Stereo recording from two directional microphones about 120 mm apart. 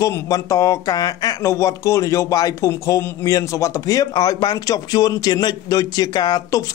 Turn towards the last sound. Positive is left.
turn(degrees=35)  # may be behind; listen again after turning